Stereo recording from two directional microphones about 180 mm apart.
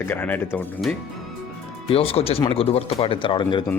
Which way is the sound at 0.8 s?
Centre (ahead or behind).